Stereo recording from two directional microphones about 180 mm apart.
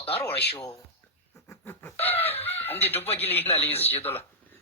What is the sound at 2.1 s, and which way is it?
Chicken, 10° left (ahead or behind).